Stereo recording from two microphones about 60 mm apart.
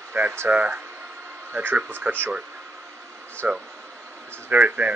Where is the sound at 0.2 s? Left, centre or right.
Right.